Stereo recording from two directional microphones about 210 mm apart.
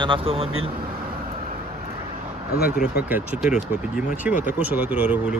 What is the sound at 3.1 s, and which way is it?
Speech, 5° right (ahead or behind).